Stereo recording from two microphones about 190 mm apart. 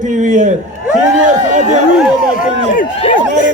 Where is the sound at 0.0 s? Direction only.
40° right (ahead or behind).